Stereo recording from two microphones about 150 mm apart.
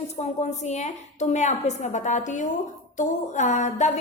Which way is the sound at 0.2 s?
50° left (ahead or behind).